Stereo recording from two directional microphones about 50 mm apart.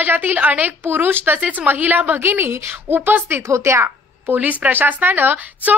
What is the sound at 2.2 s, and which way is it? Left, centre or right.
A woman's voice, right.